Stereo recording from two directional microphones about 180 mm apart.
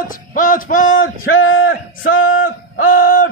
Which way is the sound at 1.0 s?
90° left.